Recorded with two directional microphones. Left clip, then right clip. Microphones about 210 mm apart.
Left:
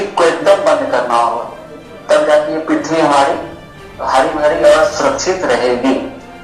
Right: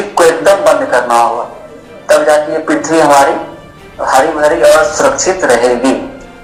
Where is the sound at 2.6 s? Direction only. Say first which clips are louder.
Right 4 dB; 40° right (ahead or behind).